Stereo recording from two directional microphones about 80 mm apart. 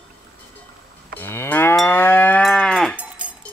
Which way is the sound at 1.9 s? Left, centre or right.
Left.